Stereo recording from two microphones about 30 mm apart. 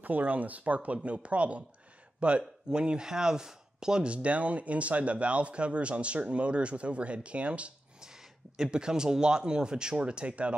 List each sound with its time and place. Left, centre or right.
0.0 s speech: right
1.0 s speech: right
4.0 s speech: right
8.0 s a sound: centre
8.6 s speech: right